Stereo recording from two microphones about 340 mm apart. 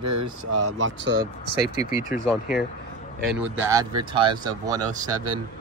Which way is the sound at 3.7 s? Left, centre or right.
Centre.